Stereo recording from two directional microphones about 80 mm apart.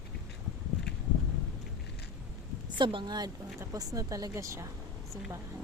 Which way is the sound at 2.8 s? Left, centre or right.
Right.